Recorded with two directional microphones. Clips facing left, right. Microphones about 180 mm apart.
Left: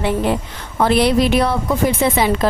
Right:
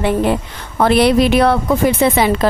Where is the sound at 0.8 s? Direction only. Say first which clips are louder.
Right 3 dB; 65° right (ahead or behind).